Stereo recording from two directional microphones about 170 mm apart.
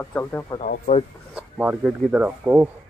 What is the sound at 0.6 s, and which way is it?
Speech, 55° left (ahead or behind).